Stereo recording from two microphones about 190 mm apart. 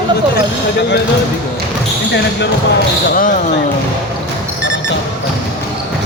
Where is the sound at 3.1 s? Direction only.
45° left (ahead or behind).